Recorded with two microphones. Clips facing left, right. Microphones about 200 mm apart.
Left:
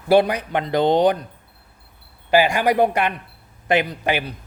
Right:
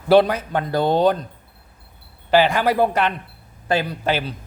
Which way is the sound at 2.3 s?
10° left (ahead or behind).